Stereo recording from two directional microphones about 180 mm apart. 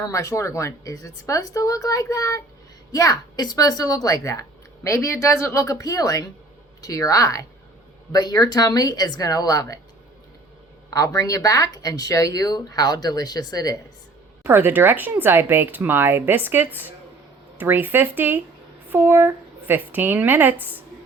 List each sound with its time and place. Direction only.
0.0 s a woman's voice: 20° left (ahead or behind)
10.9 s a woman's voice: 20° left (ahead or behind)
14.4 s speech: 10° right (ahead or behind)